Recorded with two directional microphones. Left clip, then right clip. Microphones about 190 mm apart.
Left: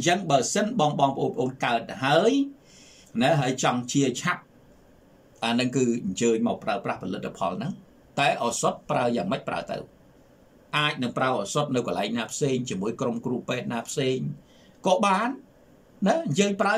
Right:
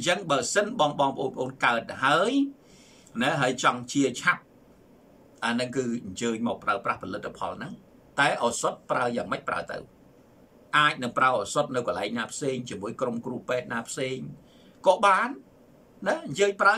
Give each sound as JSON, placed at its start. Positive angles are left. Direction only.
{"t": 0.3, "sound": "speech", "side_deg": 15}
{"t": 3.3, "sound": "speech", "side_deg": 15}
{"t": 5.4, "sound": "speech", "side_deg": 20}